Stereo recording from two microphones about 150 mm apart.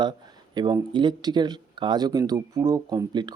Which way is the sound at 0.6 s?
30° right (ahead or behind).